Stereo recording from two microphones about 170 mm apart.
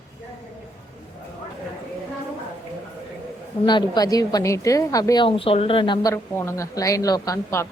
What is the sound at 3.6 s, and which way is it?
A woman's voice, 25° left (ahead or behind).